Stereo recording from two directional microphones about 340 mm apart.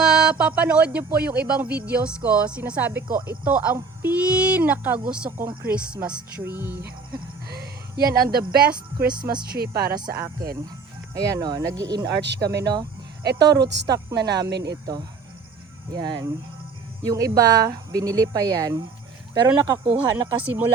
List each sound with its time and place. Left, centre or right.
0.0 s music: centre
1.5 s speech: centre
7.4 s speech: right
11.1 s speech: centre
12.2 s speech: right
15.9 s speech: centre